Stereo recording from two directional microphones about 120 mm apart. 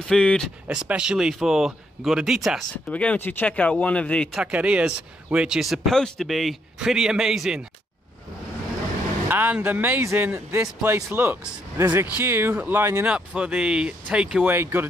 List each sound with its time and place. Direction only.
0.1 s speech: 5° left (ahead or behind)
0.7 s speech: 10° right (ahead or behind)
2.9 s speech: 10° left (ahead or behind)
4.3 s speech: 5° right (ahead or behind)
9.3 s a man's voice: 15° right (ahead or behind)
13.1 s a man's voice: 10° right (ahead or behind)